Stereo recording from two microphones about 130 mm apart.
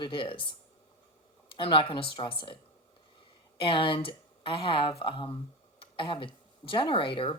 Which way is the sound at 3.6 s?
40° left (ahead or behind).